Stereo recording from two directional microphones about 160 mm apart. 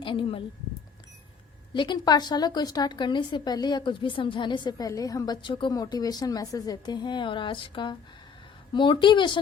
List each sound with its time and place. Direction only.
0.0 s speech: 30° left (ahead or behind)
1.7 s a woman's voice: 30° left (ahead or behind)